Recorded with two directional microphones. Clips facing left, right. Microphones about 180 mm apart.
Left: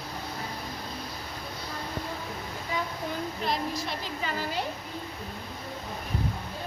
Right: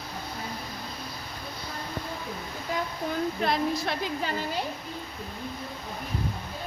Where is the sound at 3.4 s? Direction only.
60° right (ahead or behind).